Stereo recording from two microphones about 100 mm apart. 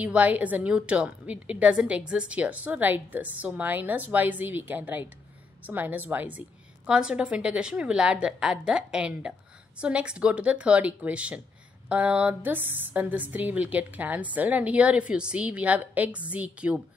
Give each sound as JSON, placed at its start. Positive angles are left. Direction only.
{"t": 0.0, "sound": "a woman's voice", "side_deg": -15}